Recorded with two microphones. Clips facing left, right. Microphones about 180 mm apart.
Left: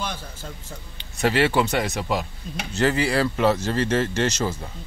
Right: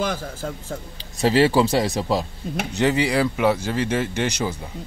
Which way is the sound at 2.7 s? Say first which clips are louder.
Right 1 dB; 20° right (ahead or behind).